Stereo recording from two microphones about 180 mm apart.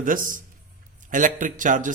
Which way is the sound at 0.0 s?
50° right (ahead or behind).